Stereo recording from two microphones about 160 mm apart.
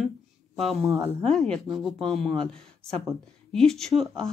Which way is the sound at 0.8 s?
20° right (ahead or behind).